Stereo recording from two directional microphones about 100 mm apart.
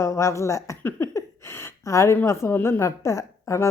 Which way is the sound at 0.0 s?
30° left (ahead or behind).